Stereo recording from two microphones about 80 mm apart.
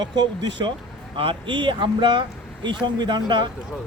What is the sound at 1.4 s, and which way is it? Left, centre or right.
Speech, right.